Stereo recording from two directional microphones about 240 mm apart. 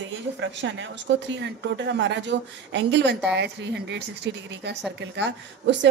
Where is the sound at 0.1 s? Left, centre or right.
Right.